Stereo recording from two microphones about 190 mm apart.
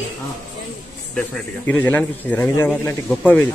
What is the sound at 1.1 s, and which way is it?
A man's voice, 5° left (ahead or behind).